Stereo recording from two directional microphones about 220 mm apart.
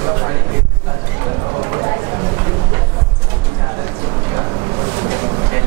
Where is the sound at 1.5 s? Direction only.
20° right (ahead or behind).